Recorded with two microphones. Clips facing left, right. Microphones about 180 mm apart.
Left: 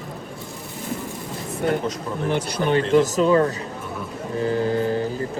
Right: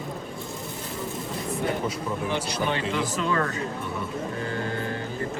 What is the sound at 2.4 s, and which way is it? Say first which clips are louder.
Speech: left 6 dB; 55° left (ahead or behind).